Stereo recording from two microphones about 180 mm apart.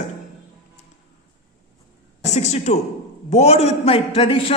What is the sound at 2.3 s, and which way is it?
A man's voice, 40° left (ahead or behind).